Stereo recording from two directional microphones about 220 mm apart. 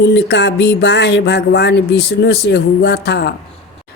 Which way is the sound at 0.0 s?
55° left (ahead or behind).